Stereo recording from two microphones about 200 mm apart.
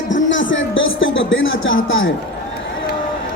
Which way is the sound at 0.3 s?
70° left (ahead or behind).